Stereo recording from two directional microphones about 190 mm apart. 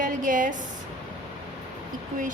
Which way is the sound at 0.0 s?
45° right (ahead or behind).